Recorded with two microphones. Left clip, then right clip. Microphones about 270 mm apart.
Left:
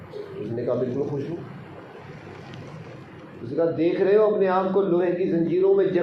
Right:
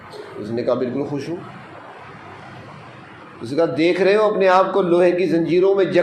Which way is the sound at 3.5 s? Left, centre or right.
Right.